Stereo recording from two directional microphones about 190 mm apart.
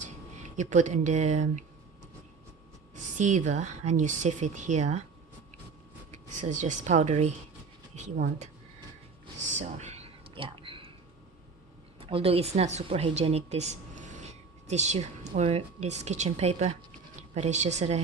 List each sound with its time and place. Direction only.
0.0 s speech: 40° right (ahead or behind)
3.0 s a woman's voice: 40° right (ahead or behind)
6.1 s a woman's voice: 40° right (ahead or behind)
7.9 s a sound: 40° right (ahead or behind)
9.4 s a sound: 40° right (ahead or behind)
12.0 s a woman's voice: 30° right (ahead or behind)